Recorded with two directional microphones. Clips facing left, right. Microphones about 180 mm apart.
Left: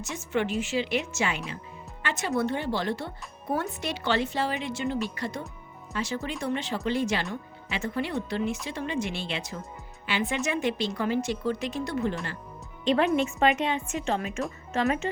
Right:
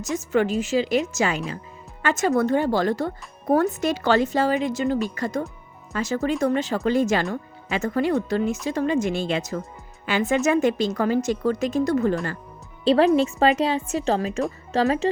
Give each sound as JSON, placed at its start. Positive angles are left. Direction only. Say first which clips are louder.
{"t": 0.0, "sound": "speech", "louder": "right 7 dB", "side_deg": -40}